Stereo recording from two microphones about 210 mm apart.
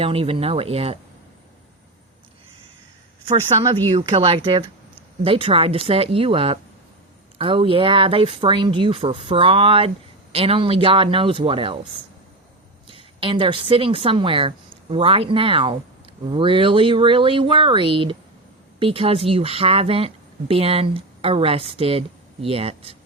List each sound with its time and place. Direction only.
0.0 s speech: 25° right (ahead or behind)
3.2 s speech: 25° right (ahead or behind)
12.9 s a woman's voice: 25° right (ahead or behind)